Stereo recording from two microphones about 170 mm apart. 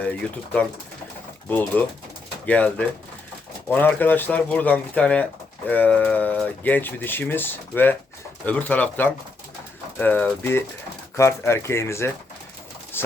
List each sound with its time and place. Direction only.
0.0 s speech: 5° left (ahead or behind)
12.9 s pigeon: 15° left (ahead or behind)